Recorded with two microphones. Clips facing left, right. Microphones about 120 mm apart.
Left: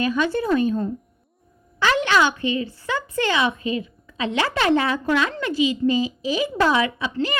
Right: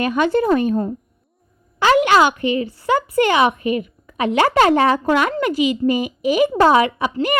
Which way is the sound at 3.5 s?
25° left (ahead or behind).